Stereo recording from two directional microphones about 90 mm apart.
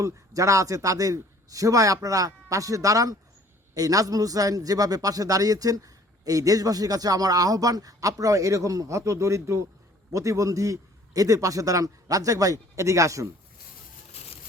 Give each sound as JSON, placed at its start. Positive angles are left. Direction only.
{"t": 0.0, "sound": "a man's voice", "side_deg": -35}